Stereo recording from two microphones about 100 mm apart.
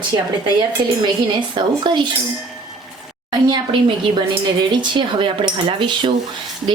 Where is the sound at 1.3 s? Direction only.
55° right (ahead or behind).